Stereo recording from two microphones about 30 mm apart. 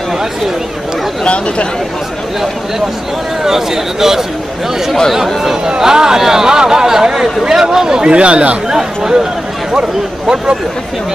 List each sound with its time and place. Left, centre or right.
1.2 s speech: left
3.4 s speech: centre
5.8 s speech: right
8.0 s speech: right
8.6 s speech: right